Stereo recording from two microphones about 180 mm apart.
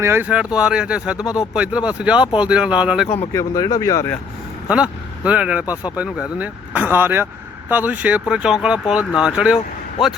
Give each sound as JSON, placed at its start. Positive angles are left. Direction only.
{"t": 0.0, "sound": "speech", "side_deg": -10}
{"t": 3.3, "sound": "speech", "side_deg": 20}
{"t": 4.7, "sound": "speech", "side_deg": -5}